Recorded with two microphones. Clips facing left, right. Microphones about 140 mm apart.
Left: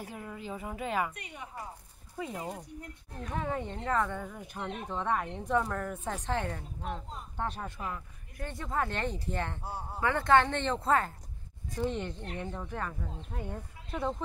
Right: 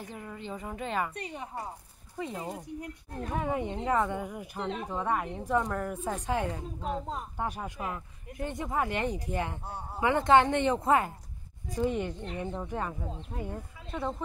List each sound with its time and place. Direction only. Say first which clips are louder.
0.0 s a woman's voice: even; 5° left (ahead or behind)
1.1 s a woman's voice: right 6 dB; 35° right (ahead or behind)
2.1 s a woman's voice: right 1 dB; centre (ahead or behind)
3.3 s speech: right 3 dB; 15° right (ahead or behind)
13.4 s speech: right 1 dB; centre (ahead or behind)